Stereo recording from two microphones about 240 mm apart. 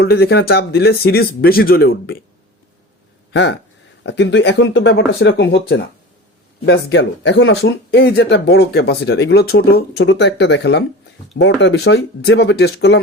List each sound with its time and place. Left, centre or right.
0.0 s speech: left
3.3 s speech: left